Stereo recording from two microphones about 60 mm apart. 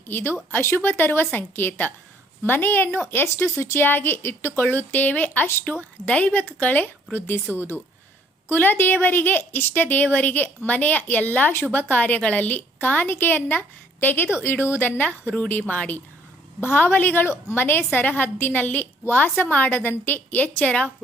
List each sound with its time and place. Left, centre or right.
0.1 s a woman's voice: left
3.2 s speech: left
3.8 s a woman's voice: left
6.1 s a woman's voice: left
8.4 s a woman's voice: left
16.6 s a woman's voice: left